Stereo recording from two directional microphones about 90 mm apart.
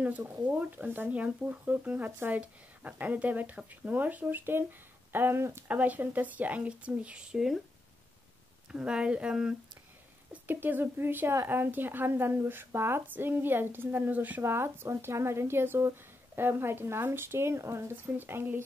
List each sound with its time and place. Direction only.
0.0 s speech: 15° right (ahead or behind)
8.7 s speech: 10° right (ahead or behind)